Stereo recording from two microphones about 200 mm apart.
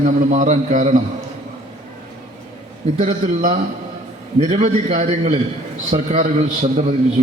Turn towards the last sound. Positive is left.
turn(degrees=-35)  # may be behind; listen again after turning